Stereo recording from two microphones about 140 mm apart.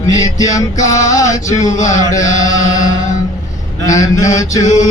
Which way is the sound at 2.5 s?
25° left (ahead or behind).